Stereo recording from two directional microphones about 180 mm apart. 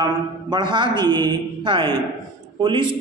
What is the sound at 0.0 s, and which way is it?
A man's voice, 25° right (ahead or behind).